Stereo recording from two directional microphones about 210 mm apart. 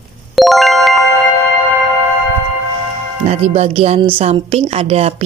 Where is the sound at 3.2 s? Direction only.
30° right (ahead or behind).